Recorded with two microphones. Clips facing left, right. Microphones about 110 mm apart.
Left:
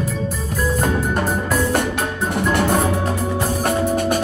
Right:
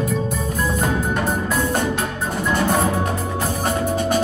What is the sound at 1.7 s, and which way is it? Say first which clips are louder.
Music: left 1 dB; 60° left (ahead or behind).